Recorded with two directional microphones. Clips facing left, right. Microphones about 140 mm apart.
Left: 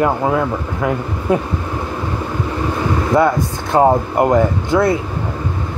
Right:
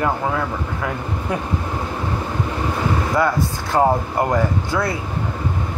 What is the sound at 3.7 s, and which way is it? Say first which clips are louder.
Speech: left 5 dB; 25° left (ahead or behind).